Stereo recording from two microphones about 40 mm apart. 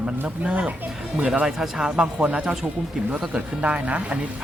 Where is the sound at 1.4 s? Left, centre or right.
Centre.